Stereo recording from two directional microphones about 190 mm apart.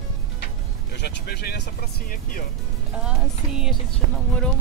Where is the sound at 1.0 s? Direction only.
60° left (ahead or behind).